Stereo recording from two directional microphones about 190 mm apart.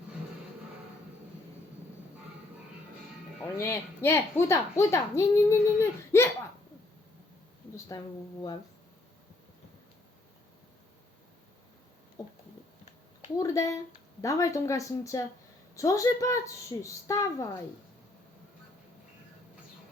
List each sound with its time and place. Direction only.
3.4 s speech: 15° left (ahead or behind)
7.9 s speech: 20° left (ahead or behind)
12.2 s a sound: 20° left (ahead or behind)
13.3 s speech: 15° left (ahead or behind)